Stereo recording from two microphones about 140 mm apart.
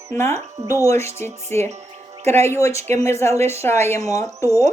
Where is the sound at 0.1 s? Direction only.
20° left (ahead or behind).